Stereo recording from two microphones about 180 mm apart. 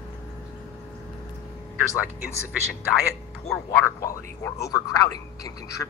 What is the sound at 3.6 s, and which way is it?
Speech, 15° left (ahead or behind).